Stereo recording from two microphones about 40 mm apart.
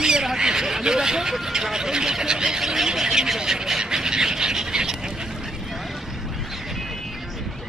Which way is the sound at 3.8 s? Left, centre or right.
Centre.